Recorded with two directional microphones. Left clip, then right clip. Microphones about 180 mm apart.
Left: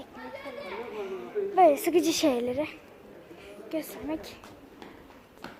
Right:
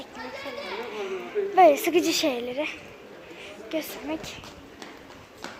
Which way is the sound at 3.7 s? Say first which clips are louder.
Right 3 dB; 15° left (ahead or behind).